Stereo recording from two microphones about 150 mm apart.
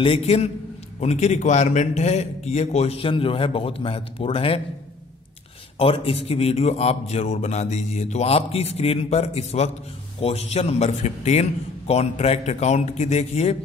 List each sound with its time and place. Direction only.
0.0 s a man's voice: 40° left (ahead or behind)
5.8 s a man's voice: 40° left (ahead or behind)